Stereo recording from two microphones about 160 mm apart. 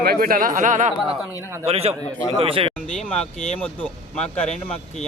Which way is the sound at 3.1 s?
5° left (ahead or behind).